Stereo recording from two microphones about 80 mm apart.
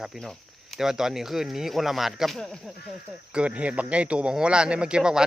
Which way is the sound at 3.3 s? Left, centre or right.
Centre.